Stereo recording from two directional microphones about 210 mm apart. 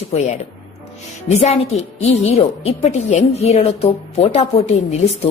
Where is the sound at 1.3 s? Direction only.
30° left (ahead or behind).